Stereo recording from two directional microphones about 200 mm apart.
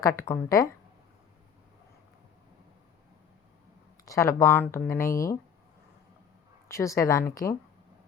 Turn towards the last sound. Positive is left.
turn(degrees=15)  # may be behind; listen again after turning